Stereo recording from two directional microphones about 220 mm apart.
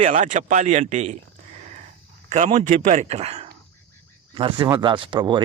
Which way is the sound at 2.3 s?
30° right (ahead or behind).